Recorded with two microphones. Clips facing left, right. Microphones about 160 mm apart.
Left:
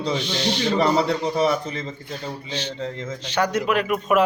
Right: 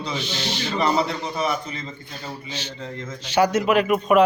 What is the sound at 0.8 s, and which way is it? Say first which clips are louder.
Speech: even; 35° left (ahead or behind).